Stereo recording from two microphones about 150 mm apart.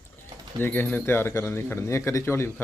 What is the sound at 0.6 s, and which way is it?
Speech, 10° left (ahead or behind).